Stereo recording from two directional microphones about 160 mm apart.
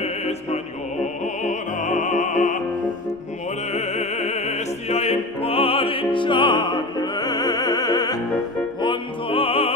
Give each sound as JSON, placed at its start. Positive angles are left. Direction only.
{"t": 0.0, "sound": "music", "side_deg": 40}
{"t": 1.2, "sound": "opera", "side_deg": 50}
{"t": 3.7, "sound": "music", "side_deg": 45}